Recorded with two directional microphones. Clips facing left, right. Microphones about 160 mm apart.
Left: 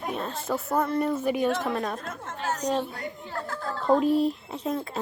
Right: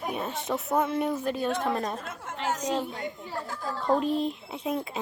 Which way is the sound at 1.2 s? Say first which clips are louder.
Left 3 dB; 10° left (ahead or behind).